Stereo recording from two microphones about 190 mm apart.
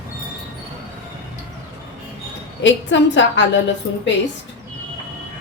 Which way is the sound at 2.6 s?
70° left (ahead or behind).